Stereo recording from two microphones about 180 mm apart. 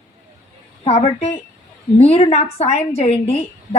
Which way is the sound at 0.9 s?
35° left (ahead or behind).